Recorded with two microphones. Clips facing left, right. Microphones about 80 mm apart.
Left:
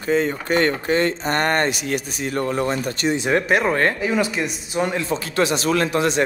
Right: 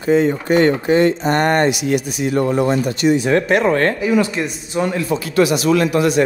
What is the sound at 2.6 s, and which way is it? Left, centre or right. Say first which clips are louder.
Speech: right 6 dB; right.